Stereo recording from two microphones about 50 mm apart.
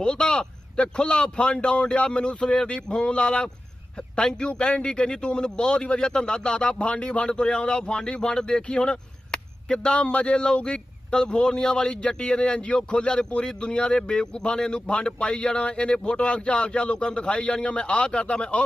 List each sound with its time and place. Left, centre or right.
0.0 s speech: centre